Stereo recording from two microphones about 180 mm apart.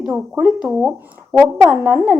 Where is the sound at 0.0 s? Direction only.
5° right (ahead or behind).